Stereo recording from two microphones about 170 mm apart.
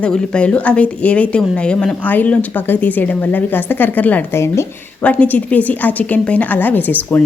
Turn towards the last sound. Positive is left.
turn(degrees=10)  # may be behind; listen again after turning